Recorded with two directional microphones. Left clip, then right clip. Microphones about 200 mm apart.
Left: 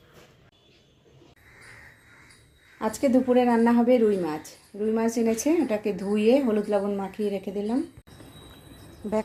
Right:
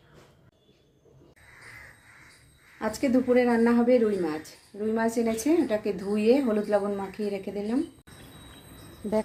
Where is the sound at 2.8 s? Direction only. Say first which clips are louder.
Left 3 dB; 15° left (ahead or behind).